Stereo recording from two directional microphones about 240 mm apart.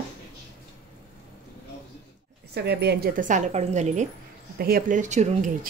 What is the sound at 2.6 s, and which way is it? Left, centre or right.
A woman's voice, right.